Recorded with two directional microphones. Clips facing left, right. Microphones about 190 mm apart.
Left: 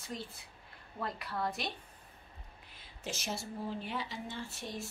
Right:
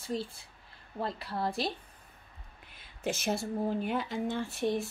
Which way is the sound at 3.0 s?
55° right (ahead or behind).